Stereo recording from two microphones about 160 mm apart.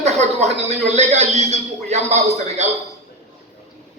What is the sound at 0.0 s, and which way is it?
Speech, 45° right (ahead or behind).